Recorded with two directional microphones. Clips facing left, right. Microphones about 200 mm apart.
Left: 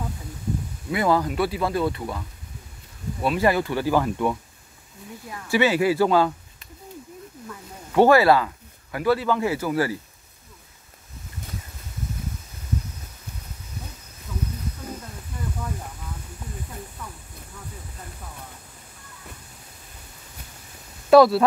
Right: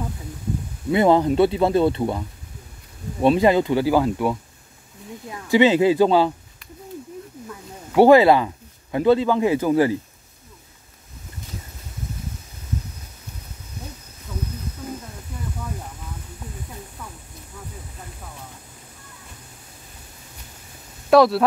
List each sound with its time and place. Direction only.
0.9 s speech: 25° right (ahead or behind)
7.9 s speech: 15° right (ahead or behind)
21.1 s speech: centre (ahead or behind)